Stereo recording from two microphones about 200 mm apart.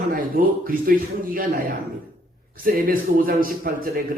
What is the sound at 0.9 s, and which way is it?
Speech, 45° right (ahead or behind).